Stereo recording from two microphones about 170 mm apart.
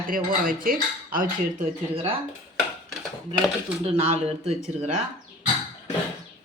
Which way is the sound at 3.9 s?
35° right (ahead or behind).